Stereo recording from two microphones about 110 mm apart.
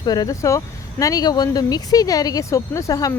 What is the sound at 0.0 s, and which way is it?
Speech, 35° left (ahead or behind).